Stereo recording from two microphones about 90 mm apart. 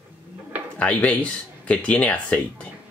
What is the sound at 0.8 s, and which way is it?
Speech, 15° left (ahead or behind).